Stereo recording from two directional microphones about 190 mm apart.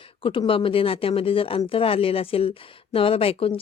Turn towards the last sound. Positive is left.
turn(degrees=30)  # may be behind; listen again after turning